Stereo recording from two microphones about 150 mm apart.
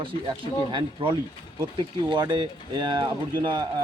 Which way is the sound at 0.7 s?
30° right (ahead or behind).